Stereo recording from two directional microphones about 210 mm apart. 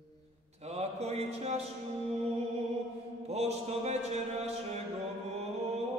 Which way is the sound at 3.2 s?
30° right (ahead or behind).